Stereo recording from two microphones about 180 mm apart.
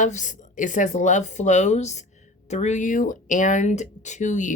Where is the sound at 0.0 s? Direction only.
45° left (ahead or behind).